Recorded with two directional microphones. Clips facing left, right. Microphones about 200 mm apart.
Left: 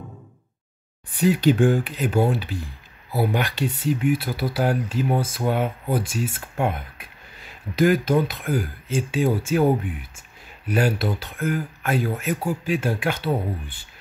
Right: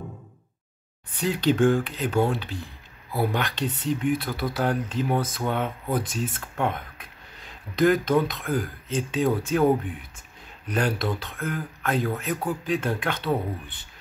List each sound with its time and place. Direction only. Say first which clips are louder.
1.1 s speech: left 5 dB; 10° left (ahead or behind)